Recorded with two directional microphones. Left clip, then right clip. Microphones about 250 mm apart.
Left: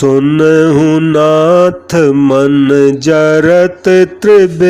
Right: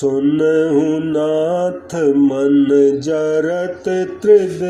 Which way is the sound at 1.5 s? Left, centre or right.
Left.